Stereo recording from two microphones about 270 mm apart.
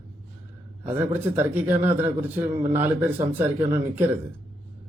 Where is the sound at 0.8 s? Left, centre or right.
Centre.